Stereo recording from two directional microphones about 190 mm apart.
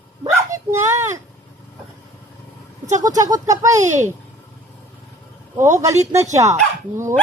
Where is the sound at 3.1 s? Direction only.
20° right (ahead or behind).